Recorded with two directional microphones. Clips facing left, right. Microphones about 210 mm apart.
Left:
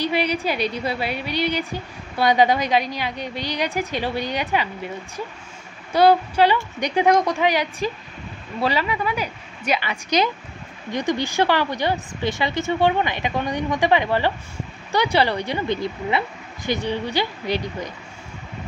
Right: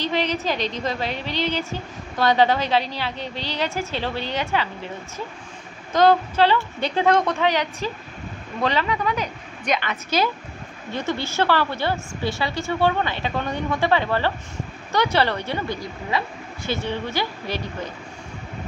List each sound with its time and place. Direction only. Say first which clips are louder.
0.0 s a woman's voice: left 2 dB; 10° left (ahead or behind)
5.9 s a woman's voice: left 1 dB; 10° left (ahead or behind)